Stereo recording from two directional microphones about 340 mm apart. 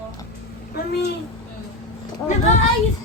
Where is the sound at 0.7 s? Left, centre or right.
Left.